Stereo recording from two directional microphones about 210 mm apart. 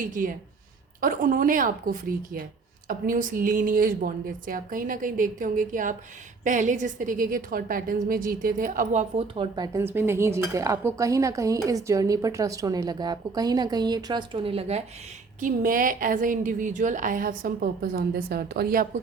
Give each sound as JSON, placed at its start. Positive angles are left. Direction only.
{"t": 0.0, "sound": "a woman's voice", "side_deg": -40}
{"t": 15.4, "sound": "speech", "side_deg": -40}